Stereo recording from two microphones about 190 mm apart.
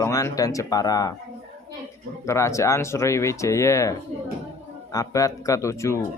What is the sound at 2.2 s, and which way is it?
Speech, 15° left (ahead or behind).